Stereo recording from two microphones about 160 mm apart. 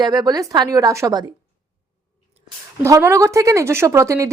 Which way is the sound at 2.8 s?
20° right (ahead or behind).